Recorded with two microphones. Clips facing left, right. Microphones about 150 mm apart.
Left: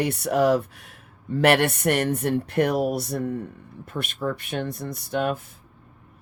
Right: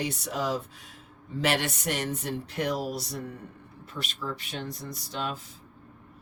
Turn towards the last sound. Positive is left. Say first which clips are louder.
# left 9 dB
turn(degrees=55)  # may be behind; listen again after turning